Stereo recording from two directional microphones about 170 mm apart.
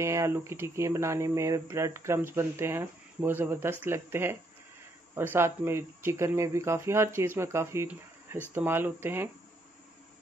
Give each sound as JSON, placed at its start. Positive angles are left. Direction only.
{"t": 0.0, "sound": "speech", "side_deg": -15}